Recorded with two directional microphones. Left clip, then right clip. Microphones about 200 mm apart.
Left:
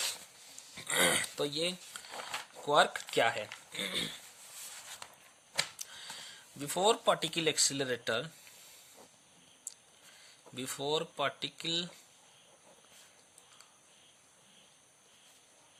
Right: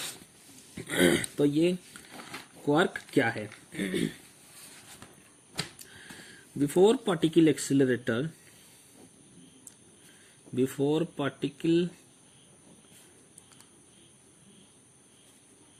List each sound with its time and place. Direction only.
0.9 s speech: 35° left (ahead or behind)
5.5 s a sound: 40° left (ahead or behind)
6.7 s speech: 35° left (ahead or behind)
10.5 s speech: 35° left (ahead or behind)